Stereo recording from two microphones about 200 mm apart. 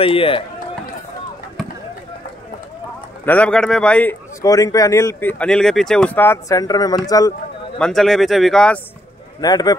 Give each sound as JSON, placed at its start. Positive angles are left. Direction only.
{"t": 0.0, "sound": "speech", "side_deg": 25}
{"t": 3.3, "sound": "speech", "side_deg": 5}
{"t": 7.8, "sound": "speech", "side_deg": 0}
{"t": 9.4, "sound": "speech", "side_deg": 20}